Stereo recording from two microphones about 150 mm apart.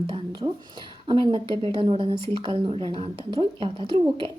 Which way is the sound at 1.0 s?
30° right (ahead or behind).